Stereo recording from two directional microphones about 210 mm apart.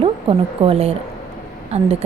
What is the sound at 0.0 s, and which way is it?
A woman's voice, 25° right (ahead or behind).